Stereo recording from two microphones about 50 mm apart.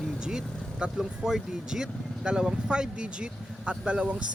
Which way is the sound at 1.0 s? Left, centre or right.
Centre.